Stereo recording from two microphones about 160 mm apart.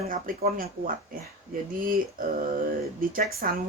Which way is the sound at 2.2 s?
60° right (ahead or behind).